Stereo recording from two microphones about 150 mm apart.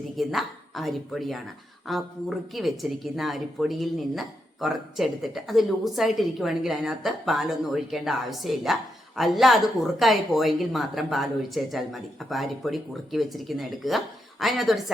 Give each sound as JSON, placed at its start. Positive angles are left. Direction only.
{"t": 0.2, "sound": "a woman's voice", "side_deg": 0}